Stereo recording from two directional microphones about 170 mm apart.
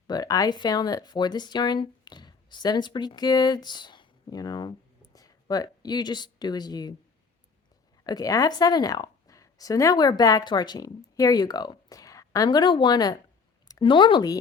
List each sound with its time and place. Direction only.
0.1 s speech: 20° left (ahead or behind)
8.0 s speech: 20° left (ahead or behind)